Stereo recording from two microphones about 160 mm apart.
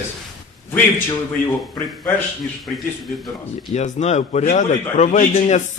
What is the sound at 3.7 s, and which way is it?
A man's voice, 45° left (ahead or behind).